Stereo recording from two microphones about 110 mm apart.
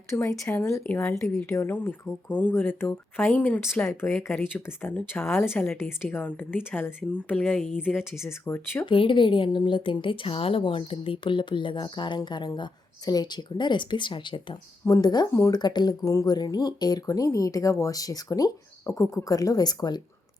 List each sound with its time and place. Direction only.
0.1 s speech: 25° left (ahead or behind)
8.9 s a woman's voice: 50° left (ahead or behind)
14.8 s speech: 35° left (ahead or behind)
15.3 s speech: 30° left (ahead or behind)
15.5 s speech: 40° left (ahead or behind)